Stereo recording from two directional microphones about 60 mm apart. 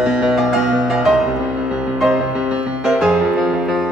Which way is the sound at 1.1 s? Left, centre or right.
Centre.